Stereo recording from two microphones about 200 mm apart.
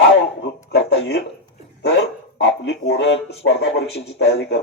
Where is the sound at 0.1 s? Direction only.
60° left (ahead or behind).